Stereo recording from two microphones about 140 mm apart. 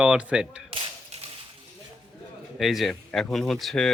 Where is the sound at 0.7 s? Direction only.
50° right (ahead or behind).